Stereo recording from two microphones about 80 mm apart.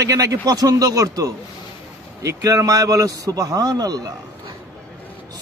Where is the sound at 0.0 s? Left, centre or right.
Right.